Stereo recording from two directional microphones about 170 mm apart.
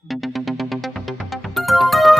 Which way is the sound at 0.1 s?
Centre (ahead or behind).